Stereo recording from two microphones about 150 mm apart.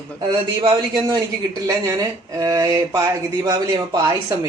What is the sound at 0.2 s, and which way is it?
Speech, 40° right (ahead or behind).